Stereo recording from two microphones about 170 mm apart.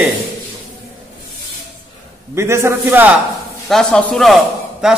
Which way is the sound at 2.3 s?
15° right (ahead or behind).